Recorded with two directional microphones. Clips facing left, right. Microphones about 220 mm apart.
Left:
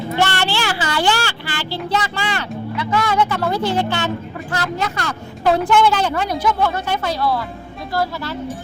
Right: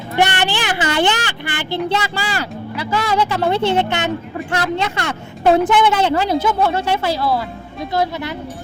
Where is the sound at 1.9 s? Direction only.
30° right (ahead or behind).